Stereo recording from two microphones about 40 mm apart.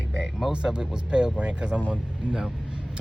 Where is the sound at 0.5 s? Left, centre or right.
Right.